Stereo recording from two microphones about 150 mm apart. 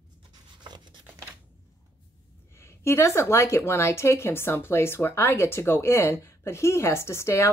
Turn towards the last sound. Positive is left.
turn(degrees=20)  # may be behind; listen again after turning